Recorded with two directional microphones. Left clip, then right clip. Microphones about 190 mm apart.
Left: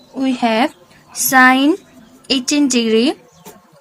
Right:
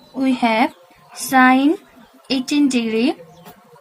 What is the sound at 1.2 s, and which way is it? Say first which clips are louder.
A woman's voice: left 3 dB; 40° left (ahead or behind).